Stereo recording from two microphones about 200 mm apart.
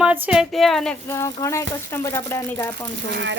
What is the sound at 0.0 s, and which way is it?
Speech, 5° right (ahead or behind).